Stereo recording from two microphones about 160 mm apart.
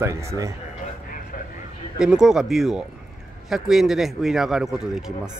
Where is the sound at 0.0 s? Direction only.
20° right (ahead or behind).